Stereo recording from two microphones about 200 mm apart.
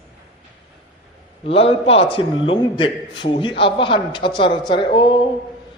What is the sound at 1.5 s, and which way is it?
A man's voice, 30° left (ahead or behind).